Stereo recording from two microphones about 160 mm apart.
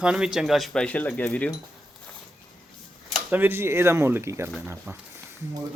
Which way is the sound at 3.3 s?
10° right (ahead or behind).